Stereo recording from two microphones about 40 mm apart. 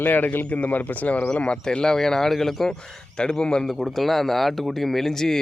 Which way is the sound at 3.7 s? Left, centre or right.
Centre.